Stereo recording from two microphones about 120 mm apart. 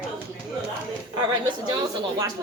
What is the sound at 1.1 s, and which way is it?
A woman's voice, 35° right (ahead or behind).